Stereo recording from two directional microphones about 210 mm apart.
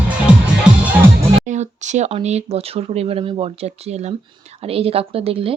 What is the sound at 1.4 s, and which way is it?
A woman's voice, 35° right (ahead or behind).